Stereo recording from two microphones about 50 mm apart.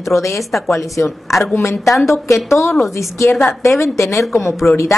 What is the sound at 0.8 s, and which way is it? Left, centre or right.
Speech, left.